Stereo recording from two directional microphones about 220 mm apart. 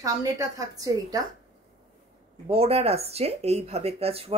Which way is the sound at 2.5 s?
25° right (ahead or behind).